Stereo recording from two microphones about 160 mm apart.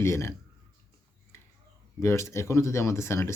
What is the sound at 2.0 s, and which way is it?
Speech, 15° left (ahead or behind).